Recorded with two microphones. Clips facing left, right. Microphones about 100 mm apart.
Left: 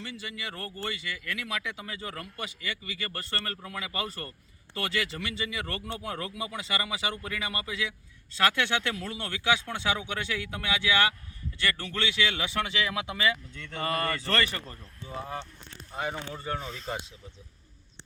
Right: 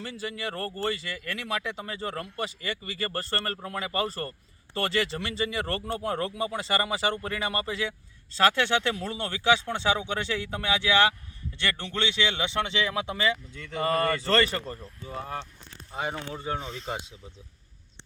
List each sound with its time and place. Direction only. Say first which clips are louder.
0.0 s speech: right 5 dB; 40° right (ahead or behind)
13.5 s speech: right 4 dB; 5° right (ahead or behind)
13.8 s speech: right 5 dB; 30° right (ahead or behind)
15.0 s speech: right 1 dB; centre (ahead or behind)
15.9 s speech: right 1 dB; 20° right (ahead or behind)